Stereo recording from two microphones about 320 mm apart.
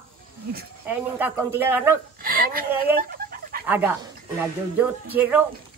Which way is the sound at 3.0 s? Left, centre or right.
Right.